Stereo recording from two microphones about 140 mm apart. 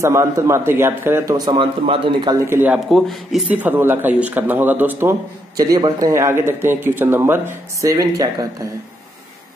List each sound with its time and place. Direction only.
0.0 s speech: 20° right (ahead or behind); by 2.3 s 35° right (ahead or behind)
2.4 s speech: 15° right (ahead or behind)
2.9 s speech: centre (ahead or behind)
3.5 s speech: 15° right (ahead or behind)
5.6 s speech: 25° right (ahead or behind)